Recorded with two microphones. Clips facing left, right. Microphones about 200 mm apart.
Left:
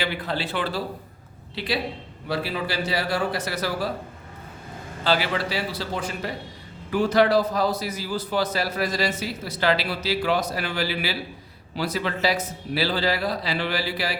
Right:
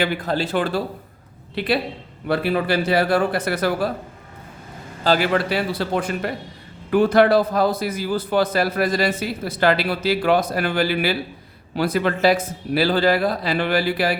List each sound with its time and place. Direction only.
0.0 s a man's voice: 45° right (ahead or behind)
5.0 s a man's voice: 45° right (ahead or behind)